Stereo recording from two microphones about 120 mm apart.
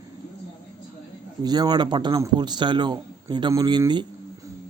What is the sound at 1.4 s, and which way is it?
A man's voice, 35° right (ahead or behind).